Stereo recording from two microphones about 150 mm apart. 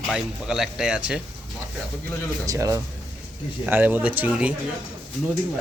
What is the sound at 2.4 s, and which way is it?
Speech, 20° right (ahead or behind).